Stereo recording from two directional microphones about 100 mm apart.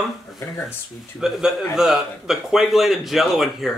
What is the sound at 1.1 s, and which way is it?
Speech, 5° right (ahead or behind).